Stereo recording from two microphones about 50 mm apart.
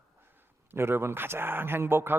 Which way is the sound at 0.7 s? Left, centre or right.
Right.